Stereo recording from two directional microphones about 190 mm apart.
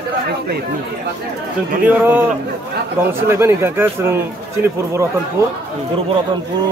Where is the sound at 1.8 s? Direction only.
10° right (ahead or behind).